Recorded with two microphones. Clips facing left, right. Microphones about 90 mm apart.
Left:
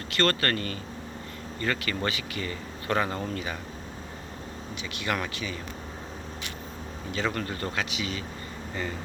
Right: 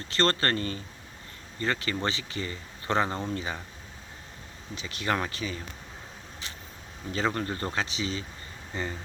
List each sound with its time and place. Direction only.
0.1 s speech: 30° right (ahead or behind)
4.7 s speech: 35° right (ahead or behind)
7.1 s speech: 30° right (ahead or behind)